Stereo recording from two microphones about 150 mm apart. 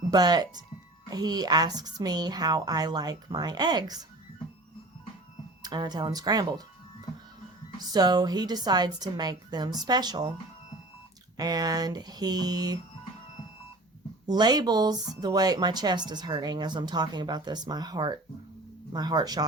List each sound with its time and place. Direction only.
0.1 s speech: 25° right (ahead or behind)
5.6 s speech: 30° right (ahead or behind)
7.8 s speech: 25° right (ahead or behind)
11.3 s speech: 25° right (ahead or behind)
14.3 s speech: 30° right (ahead or behind)